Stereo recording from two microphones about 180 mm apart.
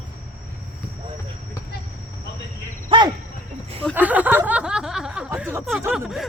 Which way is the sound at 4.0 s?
10° right (ahead or behind).